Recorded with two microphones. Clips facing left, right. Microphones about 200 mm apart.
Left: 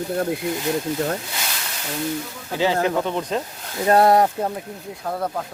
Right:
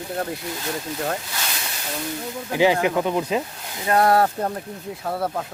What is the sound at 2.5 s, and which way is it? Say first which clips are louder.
Speech: right 1 dB; 15° right (ahead or behind).